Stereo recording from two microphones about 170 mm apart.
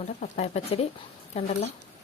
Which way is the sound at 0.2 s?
40° left (ahead or behind).